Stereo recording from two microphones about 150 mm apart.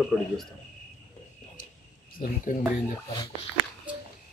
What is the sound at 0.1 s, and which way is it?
Speech, centre (ahead or behind).